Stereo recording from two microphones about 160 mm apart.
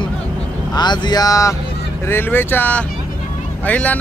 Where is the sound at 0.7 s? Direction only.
25° left (ahead or behind).